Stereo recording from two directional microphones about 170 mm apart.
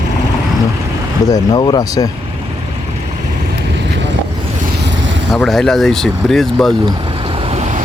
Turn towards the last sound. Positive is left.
turn(degrees=0)  # may be behind; listen again after turning